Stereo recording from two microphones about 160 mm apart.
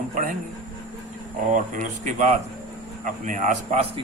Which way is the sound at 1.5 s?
50° right (ahead or behind).